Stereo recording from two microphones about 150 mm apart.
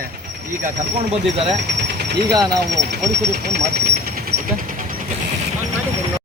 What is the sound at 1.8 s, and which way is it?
Ratchet, 90° right.